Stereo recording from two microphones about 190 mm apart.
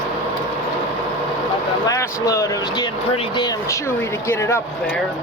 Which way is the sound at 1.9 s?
15° left (ahead or behind).